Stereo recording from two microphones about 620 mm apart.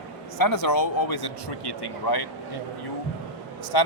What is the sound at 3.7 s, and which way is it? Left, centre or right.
Speech, left.